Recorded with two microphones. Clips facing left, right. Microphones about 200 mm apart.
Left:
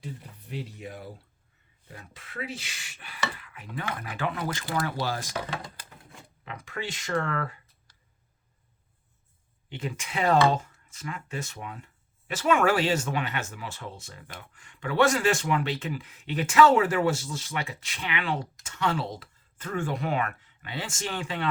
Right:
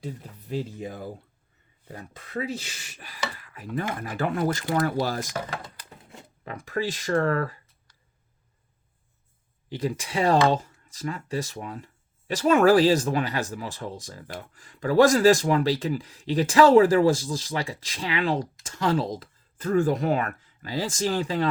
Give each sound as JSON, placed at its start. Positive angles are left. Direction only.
{"t": 1.9, "sound": "speech", "side_deg": -40}
{"t": 6.4, "sound": "speech", "side_deg": -40}
{"t": 9.6, "sound": "speech", "side_deg": -35}